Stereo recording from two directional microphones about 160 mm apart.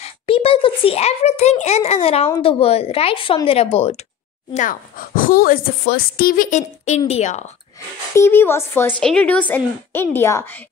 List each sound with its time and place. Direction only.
0.0 s a child's voice: 35° left (ahead or behind)
4.6 s a woman's voice: 60° left (ahead or behind)
8.1 s a woman's voice: 15° left (ahead or behind)